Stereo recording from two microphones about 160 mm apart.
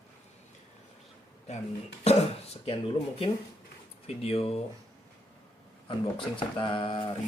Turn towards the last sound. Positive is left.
turn(degrees=35)  # may be behind; listen again after turning